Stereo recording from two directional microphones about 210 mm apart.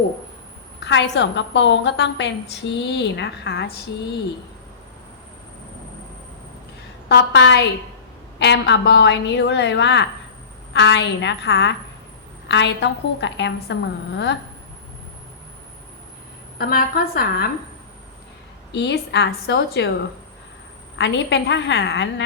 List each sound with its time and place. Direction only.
0.9 s a woman's voice: 55° left (ahead or behind)
7.1 s a woman's voice: 55° left (ahead or behind)
16.6 s a woman's voice: 45° left (ahead or behind)
18.7 s a woman's voice: 55° left (ahead or behind)
21.0 s a woman's voice: 60° left (ahead or behind)